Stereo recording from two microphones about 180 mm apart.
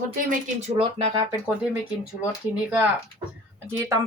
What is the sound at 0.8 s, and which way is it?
Speech, 30° right (ahead or behind).